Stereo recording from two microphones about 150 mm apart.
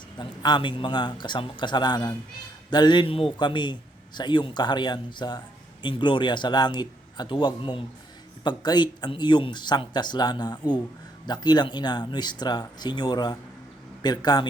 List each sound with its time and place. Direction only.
0.2 s a man's voice: 30° left (ahead or behind)